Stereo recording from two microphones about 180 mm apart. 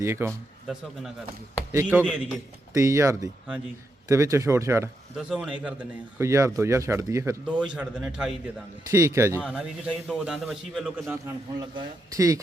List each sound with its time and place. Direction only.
0.0 s speech: 15° right (ahead or behind)
0.3 s a man's voice: 5° right (ahead or behind)
7.4 s a man's voice: 5° right (ahead or behind)
8.9 s speech: 15° right (ahead or behind)
9.4 s a man's voice: 5° right (ahead or behind)
11.6 s speech: 25° right (ahead or behind)